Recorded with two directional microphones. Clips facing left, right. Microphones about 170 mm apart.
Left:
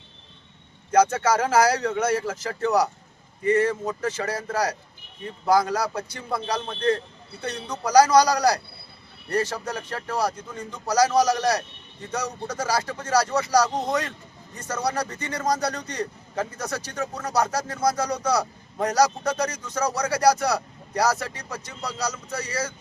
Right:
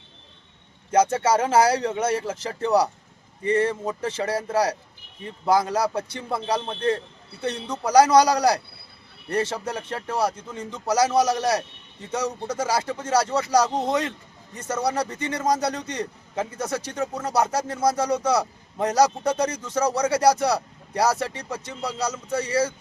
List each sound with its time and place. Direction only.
0.9 s a man's voice: 25° right (ahead or behind)